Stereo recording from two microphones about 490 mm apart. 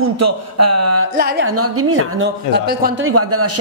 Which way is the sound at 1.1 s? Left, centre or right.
Centre.